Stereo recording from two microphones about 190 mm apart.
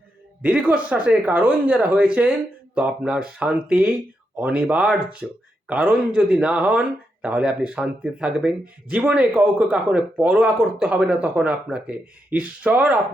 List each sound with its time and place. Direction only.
0.4 s speech: 5° right (ahead or behind)